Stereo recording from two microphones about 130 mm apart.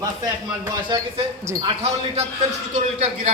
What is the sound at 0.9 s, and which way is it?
Speech, 35° right (ahead or behind).